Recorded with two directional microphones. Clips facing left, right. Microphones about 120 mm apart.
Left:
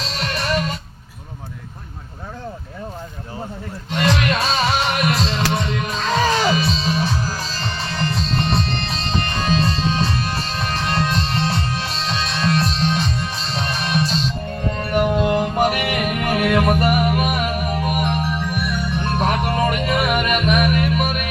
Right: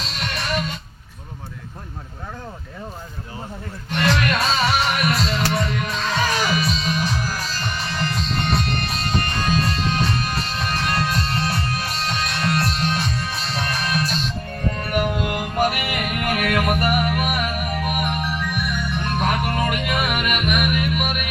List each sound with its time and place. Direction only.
3.9 s music: 20° left (ahead or behind)